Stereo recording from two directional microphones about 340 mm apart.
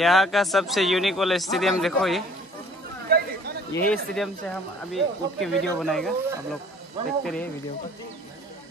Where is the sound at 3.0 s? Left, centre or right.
Right.